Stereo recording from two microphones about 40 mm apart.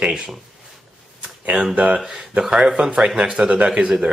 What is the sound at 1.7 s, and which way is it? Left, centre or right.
Speech, right.